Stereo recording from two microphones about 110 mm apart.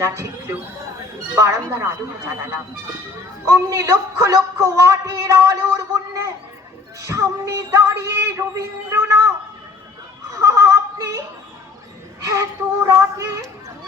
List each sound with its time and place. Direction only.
0.0 s speech: 25° right (ahead or behind)
1.7 s speech: 25° right (ahead or behind)
10.3 s a sound: 25° right (ahead or behind)
12.2 s child singing: 25° right (ahead or behind)